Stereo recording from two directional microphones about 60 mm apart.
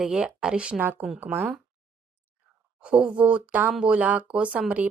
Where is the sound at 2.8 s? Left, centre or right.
Centre.